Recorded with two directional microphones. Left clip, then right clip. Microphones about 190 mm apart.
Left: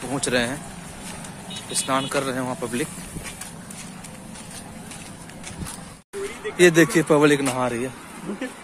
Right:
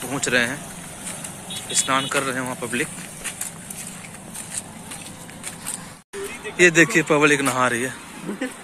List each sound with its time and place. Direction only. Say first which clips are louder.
0.1 s speech: right 2 dB; 10° left (ahead or behind)
6.5 s speech: right 1 dB; 20° left (ahead or behind)
7.5 s speech: right 4 dB; 5° left (ahead or behind)
8.3 s speech: right 2 dB; 45° right (ahead or behind)